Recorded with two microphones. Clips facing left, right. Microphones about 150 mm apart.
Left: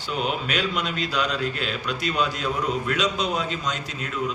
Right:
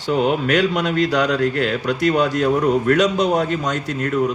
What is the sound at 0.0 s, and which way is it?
A man's voice, 75° right (ahead or behind).